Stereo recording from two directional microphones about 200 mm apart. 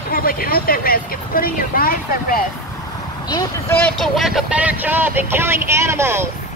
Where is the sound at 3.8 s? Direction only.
Centre (ahead or behind).